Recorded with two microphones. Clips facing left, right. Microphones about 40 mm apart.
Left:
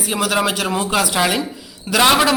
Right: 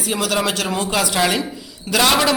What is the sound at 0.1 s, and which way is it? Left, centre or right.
A man's voice, centre.